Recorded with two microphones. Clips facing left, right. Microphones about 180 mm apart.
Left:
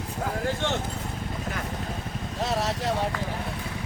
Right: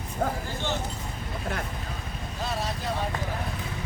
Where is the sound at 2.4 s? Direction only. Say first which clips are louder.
Left 4 dB; 80° left.